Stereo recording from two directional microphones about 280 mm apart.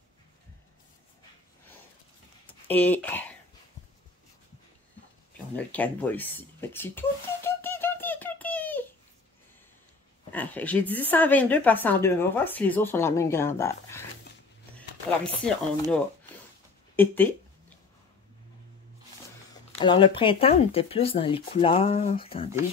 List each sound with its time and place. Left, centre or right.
2.7 s a woman's voice: centre
5.7 s a sound: centre
10.3 s a woman's voice: centre
15.4 s speech: centre
19.8 s speech: centre